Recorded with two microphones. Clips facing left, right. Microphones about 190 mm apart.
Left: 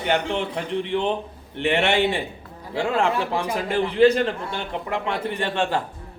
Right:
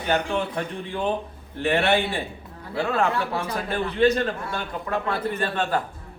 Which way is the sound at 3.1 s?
20° left (ahead or behind).